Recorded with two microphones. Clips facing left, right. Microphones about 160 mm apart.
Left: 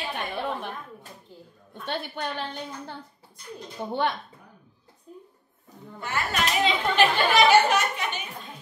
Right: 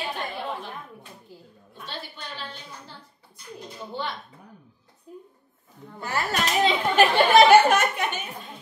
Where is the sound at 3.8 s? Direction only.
60° left (ahead or behind).